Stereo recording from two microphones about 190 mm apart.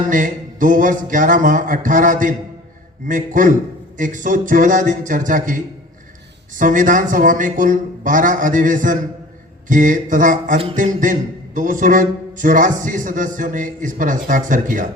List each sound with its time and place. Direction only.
0.1 s a man's voice: 45° right (ahead or behind)
6.6 s a man's voice: 45° right (ahead or behind)